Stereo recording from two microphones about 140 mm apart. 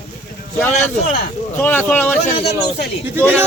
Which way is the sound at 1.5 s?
15° left (ahead or behind).